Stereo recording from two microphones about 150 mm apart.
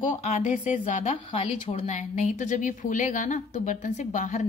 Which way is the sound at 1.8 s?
55° left (ahead or behind).